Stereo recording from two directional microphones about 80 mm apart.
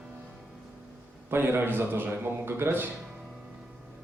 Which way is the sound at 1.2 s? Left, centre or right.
Right.